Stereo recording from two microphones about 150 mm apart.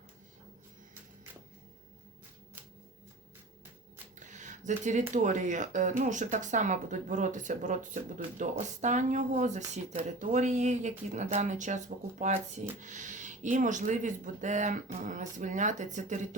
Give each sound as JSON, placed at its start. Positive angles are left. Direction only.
{"t": 4.2, "sound": "speech", "side_deg": -55}